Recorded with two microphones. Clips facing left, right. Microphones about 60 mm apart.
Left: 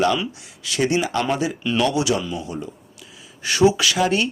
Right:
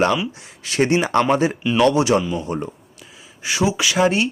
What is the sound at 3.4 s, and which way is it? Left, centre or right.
Speech, centre.